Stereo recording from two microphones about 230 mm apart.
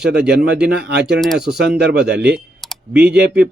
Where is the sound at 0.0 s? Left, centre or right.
Right.